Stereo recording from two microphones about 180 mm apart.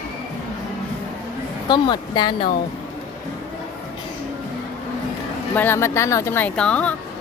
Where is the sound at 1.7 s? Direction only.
25° left (ahead or behind).